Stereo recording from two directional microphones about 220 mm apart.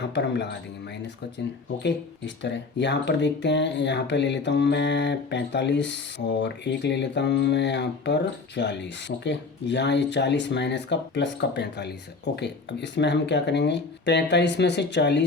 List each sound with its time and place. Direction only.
0.0 s speech: 50° left (ahead or behind)
1.8 s speech: 50° left (ahead or behind)